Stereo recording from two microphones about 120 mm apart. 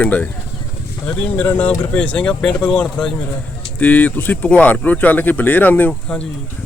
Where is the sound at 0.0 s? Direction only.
15° left (ahead or behind).